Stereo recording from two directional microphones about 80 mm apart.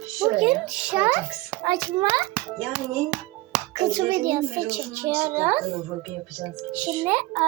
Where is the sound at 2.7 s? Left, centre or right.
Centre.